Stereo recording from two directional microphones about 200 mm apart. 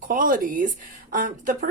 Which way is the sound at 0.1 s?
45° right (ahead or behind).